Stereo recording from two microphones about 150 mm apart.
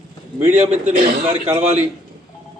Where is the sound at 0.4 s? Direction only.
50° right (ahead or behind).